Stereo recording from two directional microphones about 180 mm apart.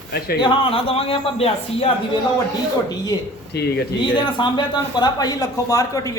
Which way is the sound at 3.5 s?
65° left (ahead or behind).